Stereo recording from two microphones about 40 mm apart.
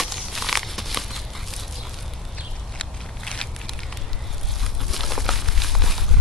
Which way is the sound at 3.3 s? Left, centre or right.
Centre.